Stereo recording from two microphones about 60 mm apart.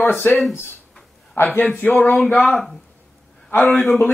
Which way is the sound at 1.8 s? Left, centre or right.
Left.